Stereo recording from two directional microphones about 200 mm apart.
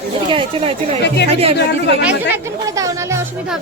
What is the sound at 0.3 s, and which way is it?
Speech, 25° right (ahead or behind).